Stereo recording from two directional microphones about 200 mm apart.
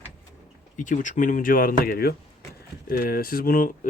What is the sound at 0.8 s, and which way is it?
Speech, 40° left (ahead or behind).